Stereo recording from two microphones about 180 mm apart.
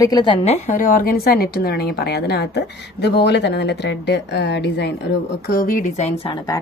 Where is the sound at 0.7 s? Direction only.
50° left (ahead or behind); by 4.9 s 70° left (ahead or behind).